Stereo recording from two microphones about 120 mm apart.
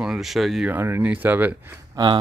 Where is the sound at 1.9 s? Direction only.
40° right (ahead or behind).